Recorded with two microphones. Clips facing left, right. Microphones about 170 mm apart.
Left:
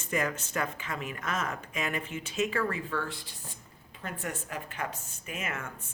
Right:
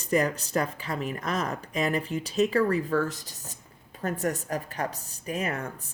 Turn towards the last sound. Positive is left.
turn(degrees=-35)  # may be behind; listen again after turning